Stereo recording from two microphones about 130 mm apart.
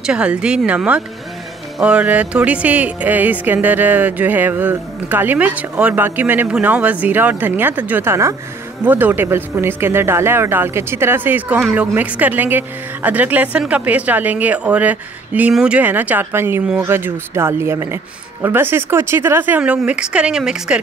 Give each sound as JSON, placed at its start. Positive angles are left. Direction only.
{"t": 0.0, "sound": "music", "side_deg": -5}